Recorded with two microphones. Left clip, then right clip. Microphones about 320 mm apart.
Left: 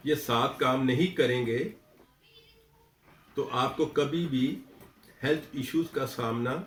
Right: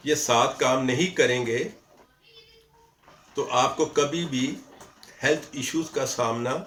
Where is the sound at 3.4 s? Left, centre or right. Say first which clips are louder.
Right 6 dB; centre.